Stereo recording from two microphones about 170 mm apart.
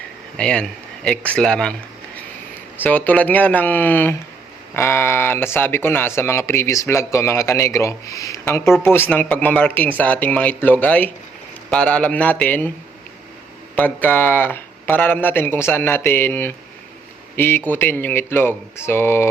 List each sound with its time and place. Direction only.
0.3 s speech: 5° left (ahead or behind)
2.8 s speech: 10° left (ahead or behind)
13.7 s speech: 10° left (ahead or behind)